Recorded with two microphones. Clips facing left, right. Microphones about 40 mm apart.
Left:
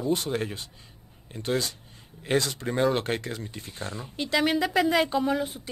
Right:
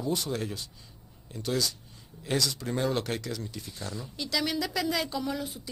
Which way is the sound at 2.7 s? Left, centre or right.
Left.